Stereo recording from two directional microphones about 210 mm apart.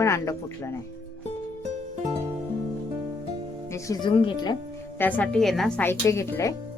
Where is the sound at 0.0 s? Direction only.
15° left (ahead or behind).